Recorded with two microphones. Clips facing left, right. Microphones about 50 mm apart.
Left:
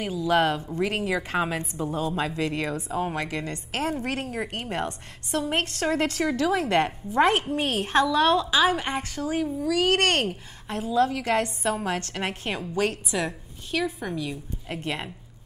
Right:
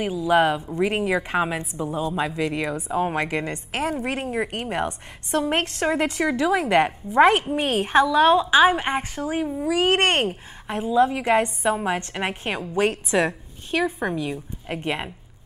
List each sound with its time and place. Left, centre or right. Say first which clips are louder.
0.0 s a woman's voice: right 3 dB; centre